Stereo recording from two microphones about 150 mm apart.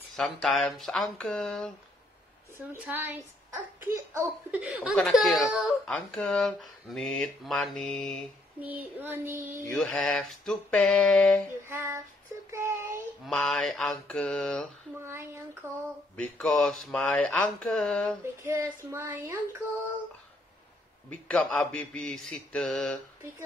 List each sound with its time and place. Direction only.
0.1 s speech: centre (ahead or behind)
2.5 s a child's voice: 15° right (ahead or behind)
4.5 s a child's voice: 10° right (ahead or behind)
8.5 s a child's voice: 10° right (ahead or behind)
9.7 s speech: 5° left (ahead or behind)
11.6 s a child's voice: 15° right (ahead or behind)
12.4 s child singing: 15° right (ahead or behind)
13.3 s speech: 5° left (ahead or behind)
15.0 s a child's voice: 15° right (ahead or behind)
16.2 s speech: 5° left (ahead or behind)
18.2 s a child's voice: 20° right (ahead or behind)
21.3 s speech: 5° left (ahead or behind)